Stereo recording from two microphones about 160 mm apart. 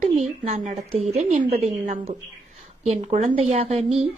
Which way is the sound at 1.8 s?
50° right (ahead or behind).